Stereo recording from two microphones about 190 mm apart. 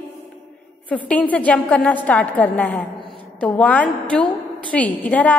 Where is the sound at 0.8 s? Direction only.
10° left (ahead or behind).